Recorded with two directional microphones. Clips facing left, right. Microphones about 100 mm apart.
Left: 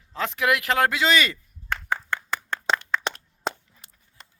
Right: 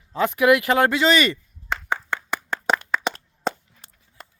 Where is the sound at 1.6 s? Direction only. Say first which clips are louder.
Right 2 dB; 15° right (ahead or behind).